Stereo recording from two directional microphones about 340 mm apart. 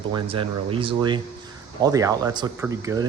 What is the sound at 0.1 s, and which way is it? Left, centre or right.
Speech, centre.